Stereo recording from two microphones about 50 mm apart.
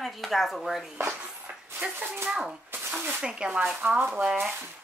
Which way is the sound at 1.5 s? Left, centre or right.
Right.